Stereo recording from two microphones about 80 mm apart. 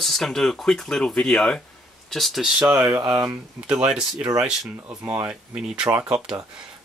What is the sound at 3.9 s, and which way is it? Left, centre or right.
Speech, centre.